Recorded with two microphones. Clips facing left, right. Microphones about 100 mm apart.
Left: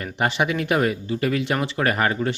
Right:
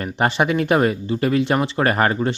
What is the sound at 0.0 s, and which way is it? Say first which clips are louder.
Speech: right 3 dB; 35° right (ahead or behind).